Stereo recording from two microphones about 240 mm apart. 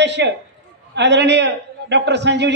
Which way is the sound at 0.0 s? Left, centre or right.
Right.